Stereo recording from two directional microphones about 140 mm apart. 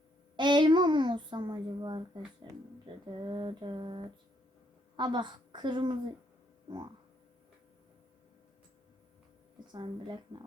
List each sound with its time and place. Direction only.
0.3 s a child's voice: 35° right (ahead or behind)
9.7 s a woman's voice: 30° right (ahead or behind)